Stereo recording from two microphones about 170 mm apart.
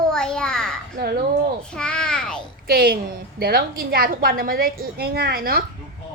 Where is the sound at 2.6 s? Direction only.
65° right (ahead or behind).